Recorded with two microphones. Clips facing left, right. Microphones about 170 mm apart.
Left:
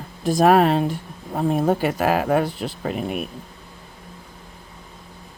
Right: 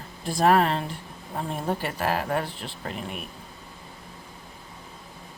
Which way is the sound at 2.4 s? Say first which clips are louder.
Left 9 dB; 40° left (ahead or behind).